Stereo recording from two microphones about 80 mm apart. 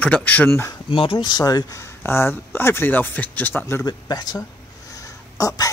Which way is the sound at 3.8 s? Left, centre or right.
Left.